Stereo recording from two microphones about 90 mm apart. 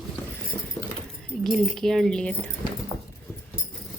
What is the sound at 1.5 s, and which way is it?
Speech, 5° left (ahead or behind).